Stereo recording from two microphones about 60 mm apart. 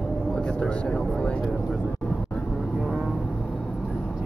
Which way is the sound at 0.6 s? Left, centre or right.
Centre.